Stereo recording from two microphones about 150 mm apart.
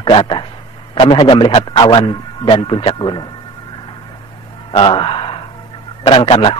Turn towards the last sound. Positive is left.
turn(degrees=35)  # may be behind; listen again after turning